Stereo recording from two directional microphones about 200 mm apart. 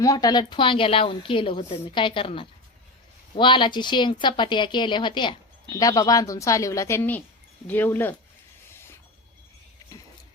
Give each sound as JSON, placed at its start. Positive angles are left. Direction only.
{"t": 0.0, "sound": "a woman's voice", "side_deg": 20}